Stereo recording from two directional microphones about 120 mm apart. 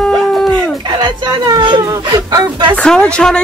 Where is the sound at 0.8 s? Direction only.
40° right (ahead or behind).